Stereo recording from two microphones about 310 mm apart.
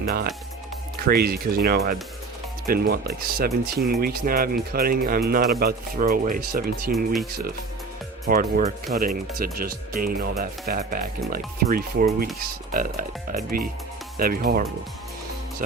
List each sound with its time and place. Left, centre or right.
0.0 s speech: right
6.9 s speech: centre
8.3 s speech: right